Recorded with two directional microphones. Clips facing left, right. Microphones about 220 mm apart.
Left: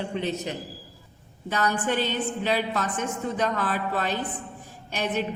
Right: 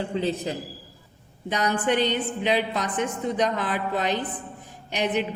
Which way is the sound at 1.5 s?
20° right (ahead or behind).